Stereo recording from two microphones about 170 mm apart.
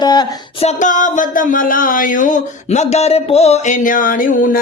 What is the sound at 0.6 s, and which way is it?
Speech, 50° left (ahead or behind).